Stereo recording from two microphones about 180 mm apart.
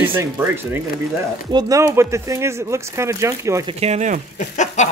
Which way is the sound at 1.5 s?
20° right (ahead or behind).